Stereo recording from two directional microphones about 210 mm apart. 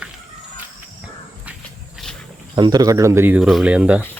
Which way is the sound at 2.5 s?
20° right (ahead or behind).